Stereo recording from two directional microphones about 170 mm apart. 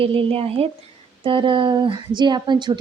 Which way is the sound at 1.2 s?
30° right (ahead or behind).